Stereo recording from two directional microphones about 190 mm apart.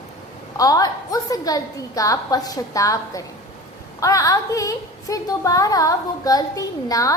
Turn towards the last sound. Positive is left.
turn(degrees=20)  # may be behind; listen again after turning